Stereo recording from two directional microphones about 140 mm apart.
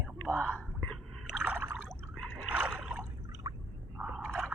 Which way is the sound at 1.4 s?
10° right (ahead or behind).